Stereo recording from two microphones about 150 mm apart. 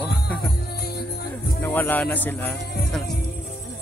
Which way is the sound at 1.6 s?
15° left (ahead or behind).